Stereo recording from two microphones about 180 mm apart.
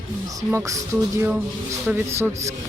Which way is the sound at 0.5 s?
15° right (ahead or behind).